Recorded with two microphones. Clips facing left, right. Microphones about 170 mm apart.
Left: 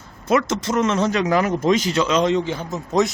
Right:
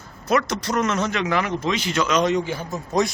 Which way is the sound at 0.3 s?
25° left (ahead or behind).